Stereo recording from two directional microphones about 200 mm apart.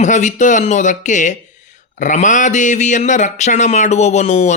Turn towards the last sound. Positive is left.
turn(degrees=35)  # may be behind; listen again after turning